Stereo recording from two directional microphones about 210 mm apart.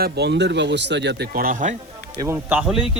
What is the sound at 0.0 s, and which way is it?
Speech, 55° right (ahead or behind).